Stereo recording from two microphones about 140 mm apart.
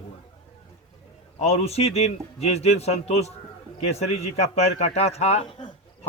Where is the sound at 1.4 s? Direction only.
45° left (ahead or behind).